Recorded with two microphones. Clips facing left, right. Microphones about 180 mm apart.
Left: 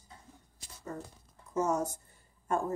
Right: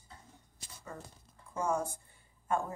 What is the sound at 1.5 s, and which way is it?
Speech, 40° left (ahead or behind).